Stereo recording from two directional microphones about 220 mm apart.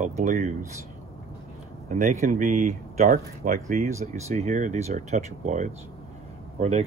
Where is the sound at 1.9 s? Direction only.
35° right (ahead or behind).